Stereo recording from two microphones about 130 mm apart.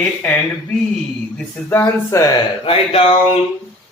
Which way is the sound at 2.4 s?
45° left (ahead or behind).